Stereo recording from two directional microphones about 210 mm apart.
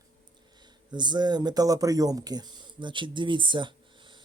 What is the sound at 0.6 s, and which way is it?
Speech, 20° right (ahead or behind).